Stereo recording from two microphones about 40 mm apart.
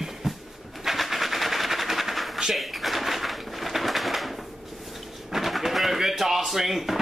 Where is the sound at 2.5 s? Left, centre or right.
Centre.